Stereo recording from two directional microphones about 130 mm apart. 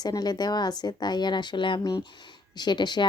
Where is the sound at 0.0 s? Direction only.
30° left (ahead or behind).